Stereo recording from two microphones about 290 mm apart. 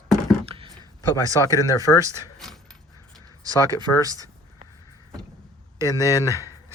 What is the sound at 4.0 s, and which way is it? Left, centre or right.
Speech, centre.